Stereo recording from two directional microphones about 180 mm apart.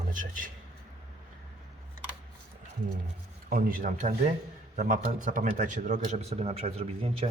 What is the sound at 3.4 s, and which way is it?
A man's voice, 50° right (ahead or behind).